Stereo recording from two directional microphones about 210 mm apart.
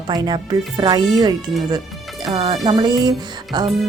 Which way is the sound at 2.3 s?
20° right (ahead or behind).